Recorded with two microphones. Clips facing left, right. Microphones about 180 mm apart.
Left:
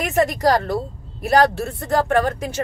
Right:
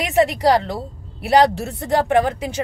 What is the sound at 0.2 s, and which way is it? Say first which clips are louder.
A woman's voice: right 2 dB; 15° right (ahead or behind).